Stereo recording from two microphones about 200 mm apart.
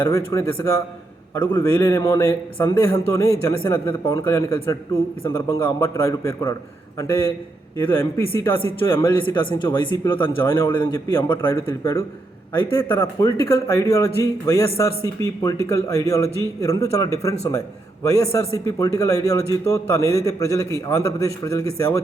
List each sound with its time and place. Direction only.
0.0 s a man's voice: 15° left (ahead or behind)
7.8 s a man's voice: 10° left (ahead or behind)
10.5 s a man's voice: 25° left (ahead or behind)